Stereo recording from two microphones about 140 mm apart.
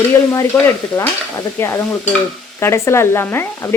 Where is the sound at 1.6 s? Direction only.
20° left (ahead or behind).